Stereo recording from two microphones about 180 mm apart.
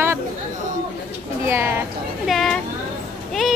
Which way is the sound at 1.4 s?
15° right (ahead or behind).